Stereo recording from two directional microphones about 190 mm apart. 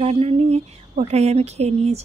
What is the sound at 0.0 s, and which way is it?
A woman's voice, 30° right (ahead or behind).